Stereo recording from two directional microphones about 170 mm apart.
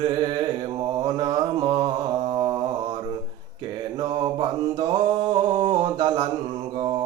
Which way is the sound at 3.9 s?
25° right (ahead or behind).